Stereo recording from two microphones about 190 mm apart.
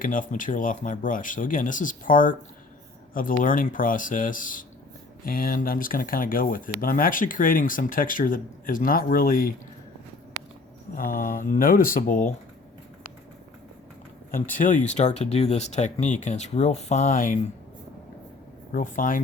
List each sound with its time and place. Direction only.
0.0 s speech: 45° left (ahead or behind)
10.9 s speech: 45° left (ahead or behind)
14.5 s speech: 45° left (ahead or behind)
18.7 s speech: 45° left (ahead or behind)